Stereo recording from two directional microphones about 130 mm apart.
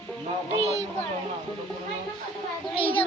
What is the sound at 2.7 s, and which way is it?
Speech, 45° left (ahead or behind).